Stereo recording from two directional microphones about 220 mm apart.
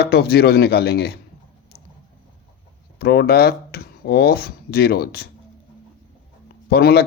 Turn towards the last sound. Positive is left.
turn(degrees=45)  # may be behind; listen again after turning